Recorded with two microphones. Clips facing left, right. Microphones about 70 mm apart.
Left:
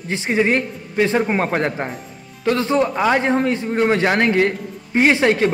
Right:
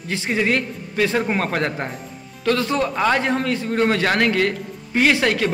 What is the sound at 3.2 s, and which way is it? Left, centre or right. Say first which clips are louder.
Speech: left 3 dB; left.